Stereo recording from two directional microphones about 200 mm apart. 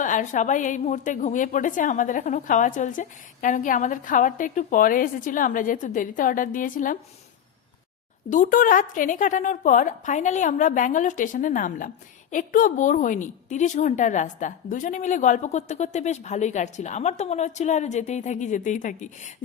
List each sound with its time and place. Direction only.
0.0 s a woman's voice: 40° left (ahead or behind)
8.3 s a woman's voice: 40° left (ahead or behind)